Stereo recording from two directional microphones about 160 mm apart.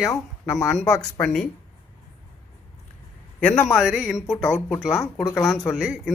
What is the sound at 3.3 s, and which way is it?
Speech, 10° left (ahead or behind).